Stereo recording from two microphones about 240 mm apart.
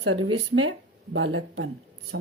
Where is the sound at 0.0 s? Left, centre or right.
Right.